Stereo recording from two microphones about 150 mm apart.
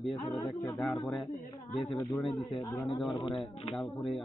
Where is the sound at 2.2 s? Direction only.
Centre (ahead or behind).